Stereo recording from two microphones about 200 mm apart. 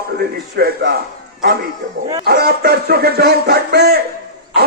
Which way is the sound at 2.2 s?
50° right (ahead or behind).